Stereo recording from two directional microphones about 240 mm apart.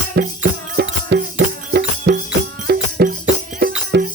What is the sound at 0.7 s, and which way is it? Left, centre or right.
Music, right.